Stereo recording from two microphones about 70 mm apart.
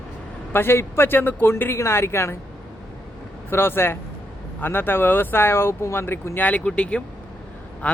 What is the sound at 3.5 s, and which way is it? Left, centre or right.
Speech, left.